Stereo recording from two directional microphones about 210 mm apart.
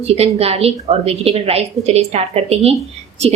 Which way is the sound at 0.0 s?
30° right (ahead or behind).